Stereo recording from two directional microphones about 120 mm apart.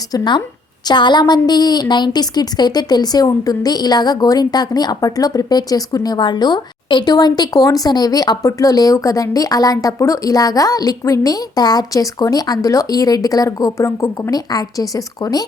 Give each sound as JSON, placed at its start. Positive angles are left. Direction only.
{"t": 0.1, "sound": "a woman's voice", "side_deg": 40}